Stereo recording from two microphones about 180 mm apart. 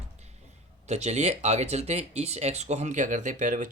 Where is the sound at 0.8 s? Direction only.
40° right (ahead or behind).